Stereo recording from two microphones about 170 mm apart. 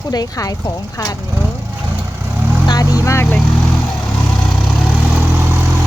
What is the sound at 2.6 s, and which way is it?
Vehicle, 25° left (ahead or behind).